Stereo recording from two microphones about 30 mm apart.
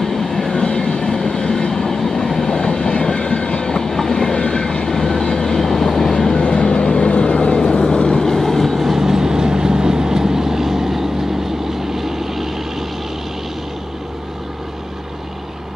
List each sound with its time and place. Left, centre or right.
0.0 s train: centre
0.3 s train: left
4.3 s train: left
4.8 s train: centre
6.4 s vehicle: left; by 8.7 s centre
8.7 s vehicle: centre